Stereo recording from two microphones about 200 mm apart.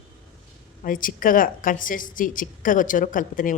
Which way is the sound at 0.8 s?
45° left (ahead or behind).